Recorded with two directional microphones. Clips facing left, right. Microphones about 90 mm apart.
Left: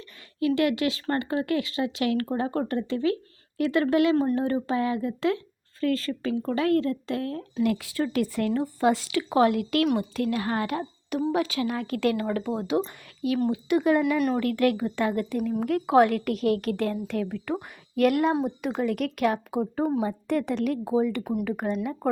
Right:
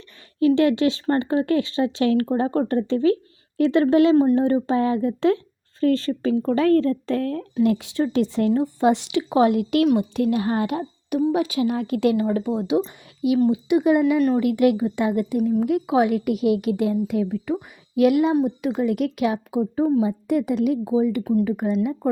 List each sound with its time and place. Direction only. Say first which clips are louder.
0.3 s speech: right 6 dB; 30° right (ahead or behind)
7.5 s a woman's voice: right 5 dB; 25° right (ahead or behind)
15.6 s a woman's voice: right 1 dB; 5° right (ahead or behind)